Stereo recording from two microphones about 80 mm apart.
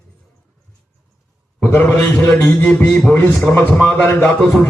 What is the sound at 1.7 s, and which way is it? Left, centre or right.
Speech, left.